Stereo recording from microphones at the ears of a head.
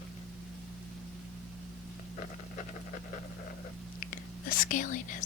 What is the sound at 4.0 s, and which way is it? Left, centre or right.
Whispering, left.